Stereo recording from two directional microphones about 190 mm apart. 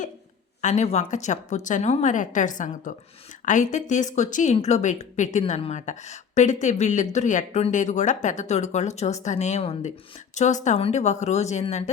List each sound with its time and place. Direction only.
0.6 s a woman's voice: 40° left (ahead or behind)